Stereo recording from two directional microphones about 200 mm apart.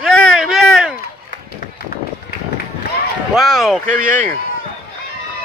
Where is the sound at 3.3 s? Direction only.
Centre (ahead or behind).